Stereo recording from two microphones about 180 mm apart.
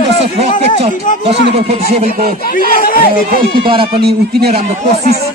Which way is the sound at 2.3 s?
50° left (ahead or behind).